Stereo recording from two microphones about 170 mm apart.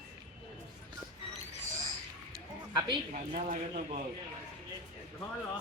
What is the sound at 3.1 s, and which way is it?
Speech, 50° right (ahead or behind).